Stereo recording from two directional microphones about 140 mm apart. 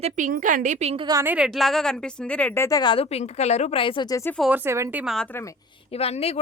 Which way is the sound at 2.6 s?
30° left (ahead or behind).